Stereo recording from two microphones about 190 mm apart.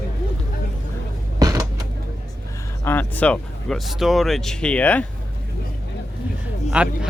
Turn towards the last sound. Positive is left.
turn(degrees=-5)  # may be behind; listen again after turning